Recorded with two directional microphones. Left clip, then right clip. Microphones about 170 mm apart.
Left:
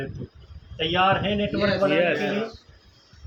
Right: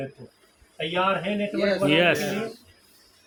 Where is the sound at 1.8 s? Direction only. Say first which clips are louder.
Right 2 dB; 60° right (ahead or behind).